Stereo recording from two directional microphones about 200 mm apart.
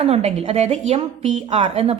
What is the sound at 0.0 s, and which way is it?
A woman's voice, 30° right (ahead or behind).